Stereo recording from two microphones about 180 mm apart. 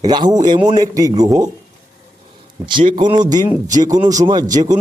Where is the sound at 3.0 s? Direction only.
25° right (ahead or behind).